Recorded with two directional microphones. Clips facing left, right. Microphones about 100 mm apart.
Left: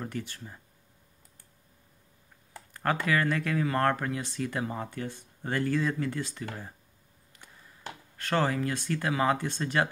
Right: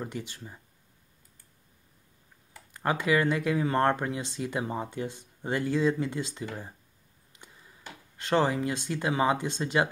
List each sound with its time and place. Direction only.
0.0 s speech: 15° right (ahead or behind)
2.7 s speech: 15° right (ahead or behind)
7.3 s a sound: 20° right (ahead or behind)
8.2 s speech: 20° right (ahead or behind)